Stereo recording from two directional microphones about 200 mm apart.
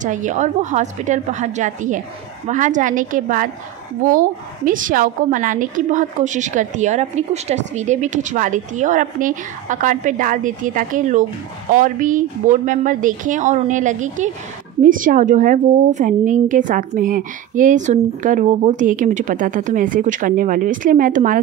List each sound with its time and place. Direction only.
0.0 s a woman's voice: 40° right (ahead or behind)